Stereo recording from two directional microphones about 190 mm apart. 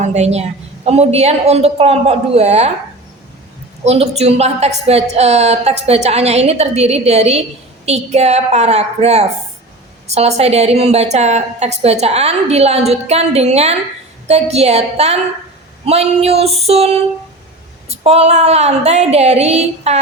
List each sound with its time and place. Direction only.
0.0 s a woman's voice: 35° right (ahead or behind)
3.8 s a woman's voice: 35° right (ahead or behind)